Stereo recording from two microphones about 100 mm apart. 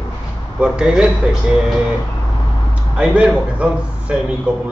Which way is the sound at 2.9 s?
10° right (ahead or behind).